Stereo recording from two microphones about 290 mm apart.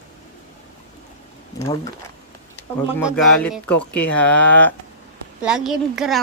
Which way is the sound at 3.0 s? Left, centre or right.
Centre.